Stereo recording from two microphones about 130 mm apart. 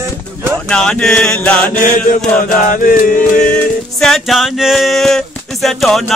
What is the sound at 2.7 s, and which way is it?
Music, 90° left.